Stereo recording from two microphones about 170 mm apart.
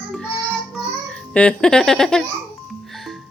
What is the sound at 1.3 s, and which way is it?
Speech, 5° left (ahead or behind).